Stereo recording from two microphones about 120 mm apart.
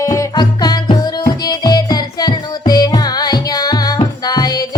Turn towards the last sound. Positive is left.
turn(degrees=30)  # may be behind; listen again after turning